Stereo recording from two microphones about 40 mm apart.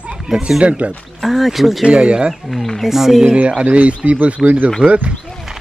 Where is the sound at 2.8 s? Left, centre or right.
Centre.